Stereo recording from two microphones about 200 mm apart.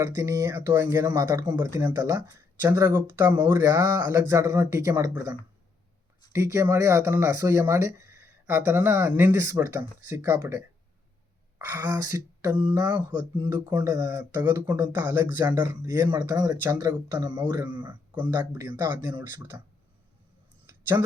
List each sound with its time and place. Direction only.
0.0 s speech: 15° right (ahead or behind)
11.6 s speech: 10° right (ahead or behind)
20.7 s a sound: 10° right (ahead or behind)